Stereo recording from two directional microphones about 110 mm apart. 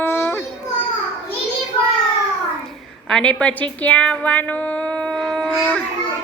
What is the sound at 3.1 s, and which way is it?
Speech, 10° left (ahead or behind).